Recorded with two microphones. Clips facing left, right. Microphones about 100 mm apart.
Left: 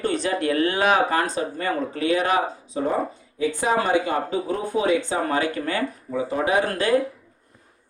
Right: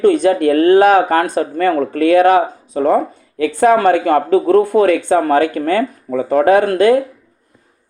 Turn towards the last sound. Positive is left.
turn(degrees=-50)  # may be behind; listen again after turning